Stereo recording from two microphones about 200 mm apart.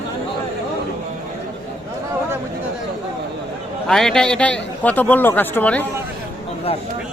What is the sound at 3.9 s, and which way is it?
A man's voice, 5° left (ahead or behind).